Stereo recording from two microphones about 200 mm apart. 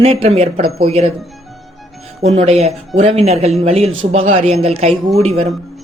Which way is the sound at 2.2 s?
30° right (ahead or behind).